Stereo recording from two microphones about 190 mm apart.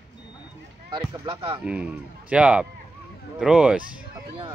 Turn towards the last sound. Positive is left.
turn(degrees=-5)  # may be behind; listen again after turning